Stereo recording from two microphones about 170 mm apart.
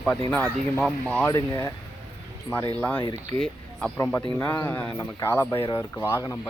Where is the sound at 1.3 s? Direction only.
25° left (ahead or behind).